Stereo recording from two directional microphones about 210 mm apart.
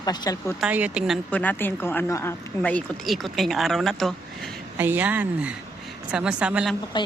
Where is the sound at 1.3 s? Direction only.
10° left (ahead or behind).